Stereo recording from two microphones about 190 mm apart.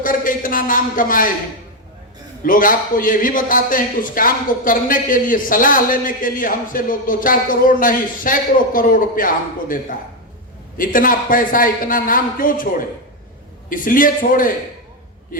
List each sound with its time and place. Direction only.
0.0 s a man's voice: 45° left (ahead or behind)
2.4 s a man's voice: 45° left (ahead or behind)
13.7 s a man's voice: 45° left (ahead or behind)